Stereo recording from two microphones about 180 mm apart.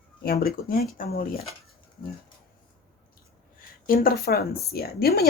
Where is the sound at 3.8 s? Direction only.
55° left (ahead or behind).